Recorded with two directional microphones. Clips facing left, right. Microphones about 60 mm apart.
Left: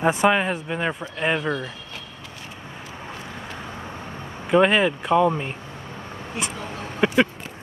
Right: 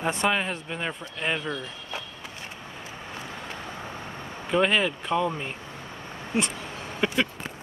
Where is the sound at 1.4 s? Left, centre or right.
Left.